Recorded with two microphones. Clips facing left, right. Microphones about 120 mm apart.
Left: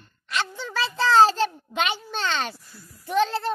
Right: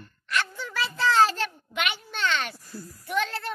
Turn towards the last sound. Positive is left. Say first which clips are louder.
# left 6 dB
turn(degrees=30)  # may be behind; listen again after turning